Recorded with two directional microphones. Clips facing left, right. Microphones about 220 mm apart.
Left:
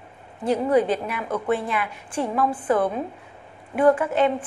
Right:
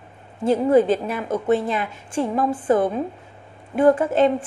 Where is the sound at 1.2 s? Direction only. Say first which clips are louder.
Right 4 dB; 25° right (ahead or behind).